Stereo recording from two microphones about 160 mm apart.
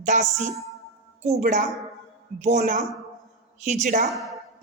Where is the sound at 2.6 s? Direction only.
55° right (ahead or behind).